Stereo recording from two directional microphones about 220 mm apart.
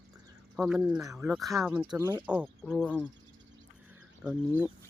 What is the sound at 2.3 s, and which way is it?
Speech, centre (ahead or behind).